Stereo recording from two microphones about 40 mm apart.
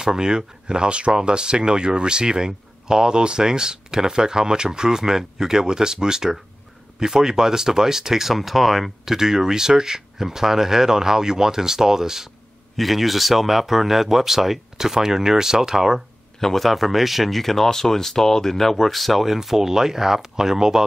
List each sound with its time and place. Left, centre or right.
0.0 s speech: centre
12.7 s speech: centre
16.3 s speech: centre